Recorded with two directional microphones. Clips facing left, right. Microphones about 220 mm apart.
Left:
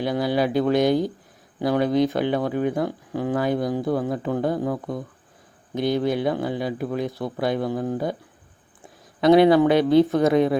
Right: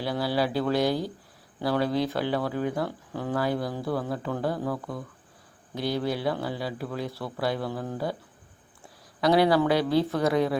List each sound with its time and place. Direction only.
0.0 s speech: 20° left (ahead or behind)